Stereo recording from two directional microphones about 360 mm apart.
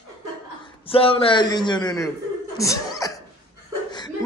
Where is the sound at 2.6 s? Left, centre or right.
Centre.